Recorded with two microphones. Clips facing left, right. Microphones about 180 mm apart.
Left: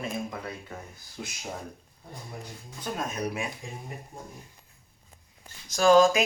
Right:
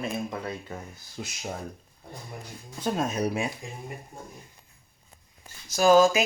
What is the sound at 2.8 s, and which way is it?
Speech, 30° right (ahead or behind).